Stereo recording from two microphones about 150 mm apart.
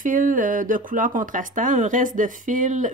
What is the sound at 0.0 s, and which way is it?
Speech, 65° right (ahead or behind).